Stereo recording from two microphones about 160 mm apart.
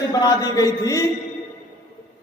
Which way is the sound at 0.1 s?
25° left (ahead or behind).